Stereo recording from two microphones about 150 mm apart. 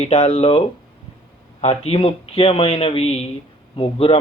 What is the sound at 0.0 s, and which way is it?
A man's voice, 45° left (ahead or behind).